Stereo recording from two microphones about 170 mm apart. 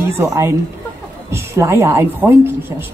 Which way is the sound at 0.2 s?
15° right (ahead or behind).